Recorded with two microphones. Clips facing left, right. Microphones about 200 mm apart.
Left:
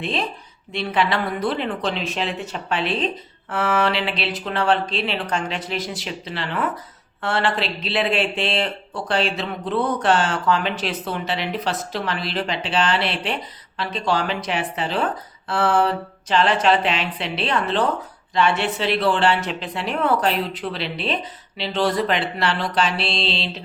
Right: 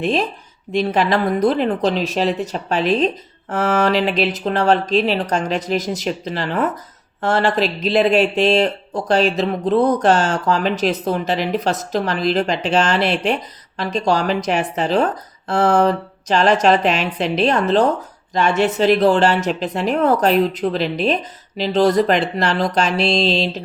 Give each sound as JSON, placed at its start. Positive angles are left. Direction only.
{"t": 0.0, "sound": "speech", "side_deg": -45}